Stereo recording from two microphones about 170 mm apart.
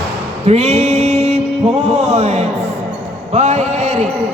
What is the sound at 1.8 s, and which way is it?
Music, 40° right (ahead or behind).